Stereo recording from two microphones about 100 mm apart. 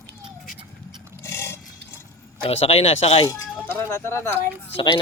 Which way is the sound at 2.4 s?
90° left.